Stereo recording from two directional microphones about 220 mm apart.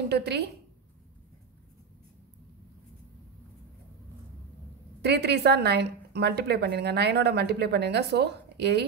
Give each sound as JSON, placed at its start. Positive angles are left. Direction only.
{"t": 0.1, "sound": "a woman's voice", "side_deg": -50}
{"t": 5.0, "sound": "a woman's voice", "side_deg": -50}